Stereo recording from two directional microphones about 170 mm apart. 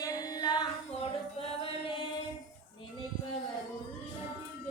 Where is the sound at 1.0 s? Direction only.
35° left (ahead or behind).